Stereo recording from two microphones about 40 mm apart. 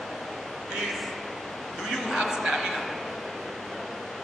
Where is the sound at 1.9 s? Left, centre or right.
Centre.